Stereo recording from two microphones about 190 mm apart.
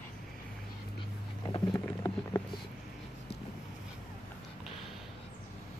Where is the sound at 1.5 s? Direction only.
20° left (ahead or behind).